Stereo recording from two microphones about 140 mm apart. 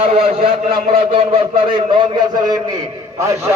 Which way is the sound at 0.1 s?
45° right (ahead or behind).